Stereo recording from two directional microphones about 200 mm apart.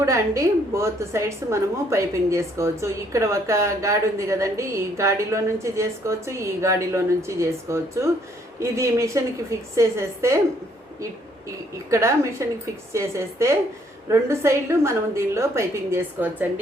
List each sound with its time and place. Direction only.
0.0 s a woman's voice: 15° right (ahead or behind)
11.9 s a woman's voice: 15° right (ahead or behind)